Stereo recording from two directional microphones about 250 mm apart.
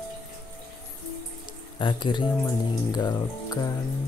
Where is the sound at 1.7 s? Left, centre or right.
Centre.